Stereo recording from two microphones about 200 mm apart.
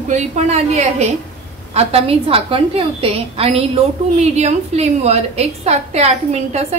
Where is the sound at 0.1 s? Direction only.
35° right (ahead or behind).